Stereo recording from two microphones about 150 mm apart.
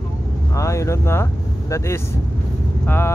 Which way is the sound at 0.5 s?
20° left (ahead or behind).